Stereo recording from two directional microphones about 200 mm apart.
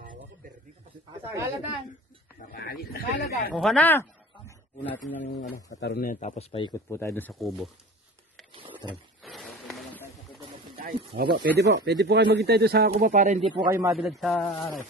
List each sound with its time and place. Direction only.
1.2 s speech: 15° right (ahead or behind)
2.5 s speech: 50° left (ahead or behind)
3.7 s a sound: 10° left (ahead or behind)
5.8 s speech: 50° left (ahead or behind); by 7.7 s centre (ahead or behind)
8.5 s a sound: 25° right (ahead or behind)
9.2 s a sound: centre (ahead or behind)
11.1 s speech: 55° right (ahead or behind); by 13.5 s 35° right (ahead or behind)
13.5 s a man's voice: 15° right (ahead or behind)
13.9 s a man's voice: centre (ahead or behind)